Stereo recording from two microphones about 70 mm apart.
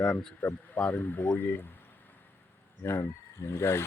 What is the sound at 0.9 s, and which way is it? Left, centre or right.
Speech, left.